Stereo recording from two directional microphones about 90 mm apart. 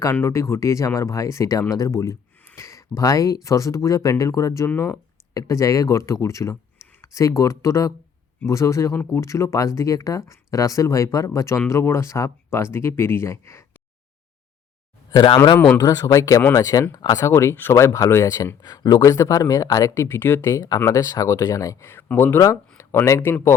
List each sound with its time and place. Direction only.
0.0 s speech: 30° left (ahead or behind)
15.8 s speech: 40° left (ahead or behind); by 20.5 s 25° left (ahead or behind)
20.5 s speech: 40° left (ahead or behind)
21.8 s speech: 25° left (ahead or behind)